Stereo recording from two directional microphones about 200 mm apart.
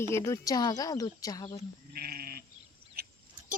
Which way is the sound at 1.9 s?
50° right (ahead or behind).